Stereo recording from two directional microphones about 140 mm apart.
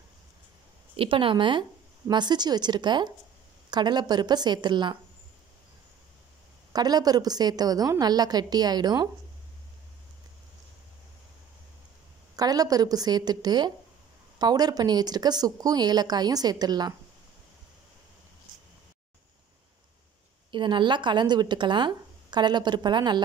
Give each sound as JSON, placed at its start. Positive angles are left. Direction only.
{"t": 0.9, "sound": "a woman's voice", "side_deg": -40}
{"t": 6.7, "sound": "a woman's voice", "side_deg": -30}
{"t": 12.4, "sound": "a woman's voice", "side_deg": -25}
{"t": 20.5, "sound": "a woman's voice", "side_deg": -35}